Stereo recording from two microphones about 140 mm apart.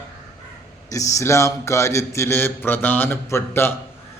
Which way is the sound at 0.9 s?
20° left (ahead or behind).